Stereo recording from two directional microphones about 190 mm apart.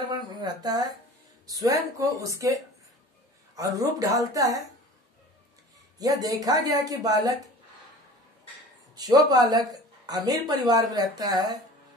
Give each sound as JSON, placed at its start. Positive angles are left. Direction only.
{"t": 0.1, "sound": "speech", "side_deg": -20}
{"t": 5.9, "sound": "speech", "side_deg": -20}
{"t": 8.9, "sound": "speech", "side_deg": -20}